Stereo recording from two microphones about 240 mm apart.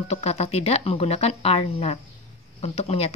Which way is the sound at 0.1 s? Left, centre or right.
Left.